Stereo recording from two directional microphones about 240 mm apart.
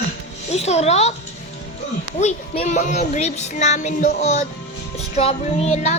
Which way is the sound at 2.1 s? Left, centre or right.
Left.